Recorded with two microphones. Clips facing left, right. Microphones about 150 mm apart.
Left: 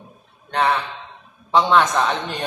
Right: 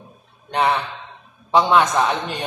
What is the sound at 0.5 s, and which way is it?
A man's voice, 15° right (ahead or behind).